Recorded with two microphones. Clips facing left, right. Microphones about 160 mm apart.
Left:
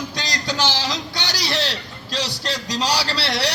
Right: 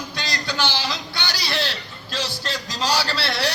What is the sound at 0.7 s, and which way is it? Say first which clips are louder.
A woman's voice: left 2 dB; 90° left.